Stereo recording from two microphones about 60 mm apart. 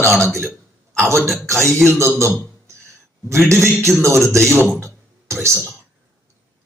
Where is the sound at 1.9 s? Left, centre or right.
Right.